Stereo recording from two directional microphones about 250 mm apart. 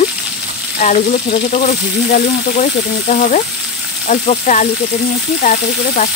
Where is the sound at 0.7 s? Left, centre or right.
Left.